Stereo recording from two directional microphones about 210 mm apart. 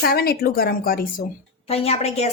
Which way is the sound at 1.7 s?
30° left (ahead or behind).